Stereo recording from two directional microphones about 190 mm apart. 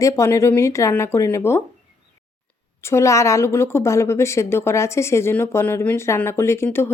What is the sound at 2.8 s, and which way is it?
Speech, 15° left (ahead or behind).